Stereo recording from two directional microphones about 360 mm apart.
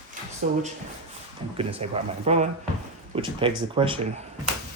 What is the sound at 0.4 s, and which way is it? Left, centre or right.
Speech, right.